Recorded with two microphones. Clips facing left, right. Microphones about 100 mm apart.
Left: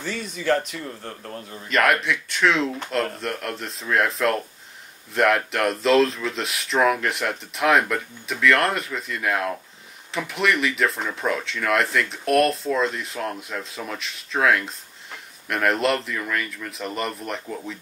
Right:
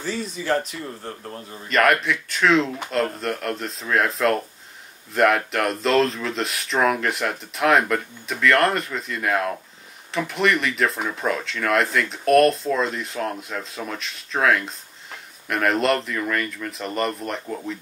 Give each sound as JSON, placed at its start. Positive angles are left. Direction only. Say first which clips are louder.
{"t": 0.0, "sound": "speech", "louder": "even", "side_deg": -35}
{"t": 1.7, "sound": "speech", "louder": "right 1 dB", "side_deg": 0}